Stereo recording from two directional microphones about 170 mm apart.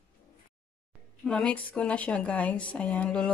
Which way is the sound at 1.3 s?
5° left (ahead or behind).